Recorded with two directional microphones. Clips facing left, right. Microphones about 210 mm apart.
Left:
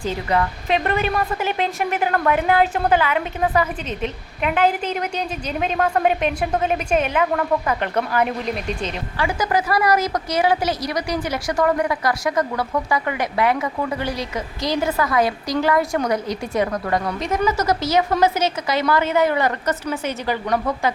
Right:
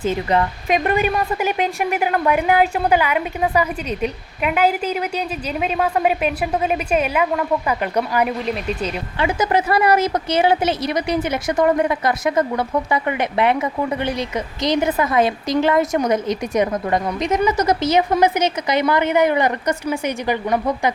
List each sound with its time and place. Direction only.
0.0 s a woman's voice: 25° right (ahead or behind)
9.1 s a woman's voice: 20° right (ahead or behind)